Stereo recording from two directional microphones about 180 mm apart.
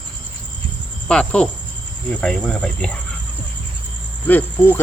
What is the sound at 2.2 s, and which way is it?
Speech, 5° left (ahead or behind).